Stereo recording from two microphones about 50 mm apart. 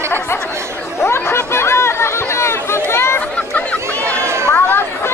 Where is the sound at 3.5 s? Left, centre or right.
Left.